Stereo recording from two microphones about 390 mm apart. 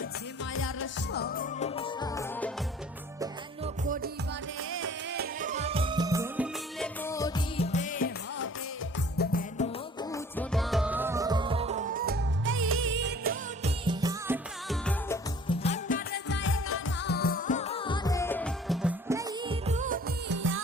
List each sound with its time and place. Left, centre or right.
0.5 s music: left; by 2.5 s centre
3.2 s music: centre; by 9.6 s left
10.0 s music: centre; by 13.7 s right
13.8 s music: centre
15.4 s music: centre; by 20.6 s right